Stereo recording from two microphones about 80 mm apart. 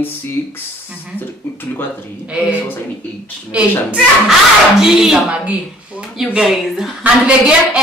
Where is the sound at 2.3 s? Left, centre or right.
Centre.